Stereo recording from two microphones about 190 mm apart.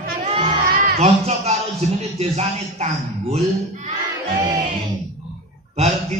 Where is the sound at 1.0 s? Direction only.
35° right (ahead or behind).